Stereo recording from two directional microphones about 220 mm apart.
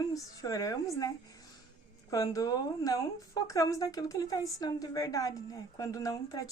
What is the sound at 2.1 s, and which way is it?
A woman's voice, 15° left (ahead or behind).